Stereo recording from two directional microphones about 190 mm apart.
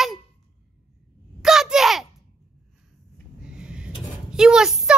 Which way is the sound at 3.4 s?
5° right (ahead or behind).